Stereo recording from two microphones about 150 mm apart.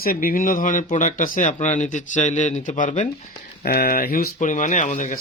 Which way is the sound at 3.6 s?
85° left.